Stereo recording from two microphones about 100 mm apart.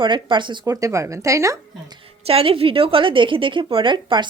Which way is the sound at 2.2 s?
75° right (ahead or behind).